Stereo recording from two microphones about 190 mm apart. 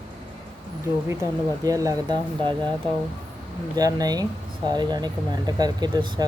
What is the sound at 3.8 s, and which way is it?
Speech, 20° right (ahead or behind).